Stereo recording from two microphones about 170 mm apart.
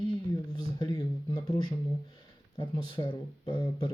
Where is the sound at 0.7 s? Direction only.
25° left (ahead or behind).